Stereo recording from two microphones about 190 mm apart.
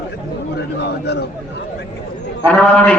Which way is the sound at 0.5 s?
60° left (ahead or behind).